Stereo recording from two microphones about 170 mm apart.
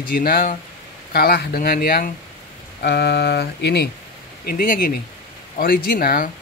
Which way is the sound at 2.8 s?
75° left (ahead or behind).